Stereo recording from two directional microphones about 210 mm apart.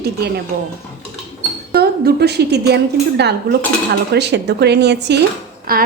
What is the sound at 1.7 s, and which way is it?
Speech, 50° right (ahead or behind).